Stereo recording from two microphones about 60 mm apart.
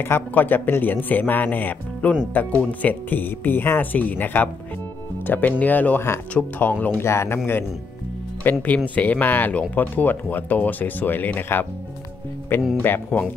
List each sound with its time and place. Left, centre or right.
0.0 s speech: left
7.1 s speech: left
8.5 s speech: left